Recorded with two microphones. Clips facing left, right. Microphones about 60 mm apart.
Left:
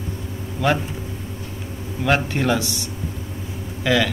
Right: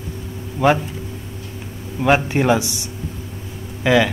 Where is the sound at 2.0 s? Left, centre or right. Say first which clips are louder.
Right 4 dB; centre.